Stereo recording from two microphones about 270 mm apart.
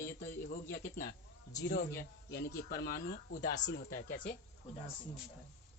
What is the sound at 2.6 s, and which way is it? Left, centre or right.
Speech, left.